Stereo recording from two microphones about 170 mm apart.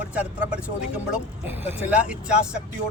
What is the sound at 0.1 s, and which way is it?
Speech, 5° right (ahead or behind).